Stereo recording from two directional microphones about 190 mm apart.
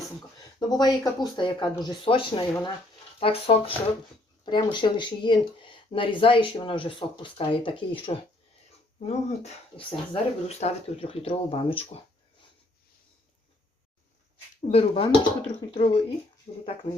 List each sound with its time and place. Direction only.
0.3 s speech: 20° left (ahead or behind)
14.7 s speech: 30° left (ahead or behind)